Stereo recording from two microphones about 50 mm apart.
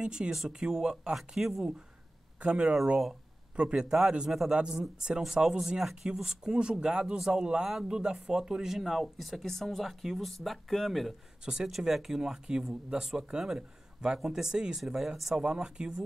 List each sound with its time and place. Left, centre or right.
0.0 s a man's voice: centre
2.4 s a man's voice: right
4.3 s speech: centre
11.4 s speech: centre
15.4 s speech: centre